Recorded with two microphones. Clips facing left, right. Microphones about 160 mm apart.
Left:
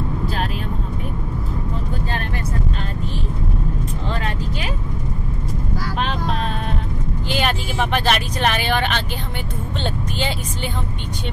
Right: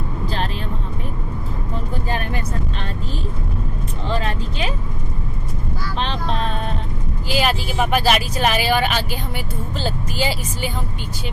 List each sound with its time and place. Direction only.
2.0 s vehicle: 10° right (ahead or behind)
4.1 s vehicle: 30° right (ahead or behind)
7.2 s vehicle: 5° right (ahead or behind)
9.8 s speech: 5° right (ahead or behind)